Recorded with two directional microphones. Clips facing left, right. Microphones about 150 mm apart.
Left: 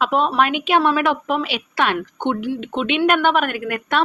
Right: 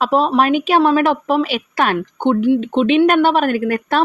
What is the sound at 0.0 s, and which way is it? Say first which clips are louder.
A woman's voice: right 3 dB; 35° right (ahead or behind).